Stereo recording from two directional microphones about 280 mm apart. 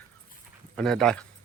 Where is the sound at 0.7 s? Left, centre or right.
Centre.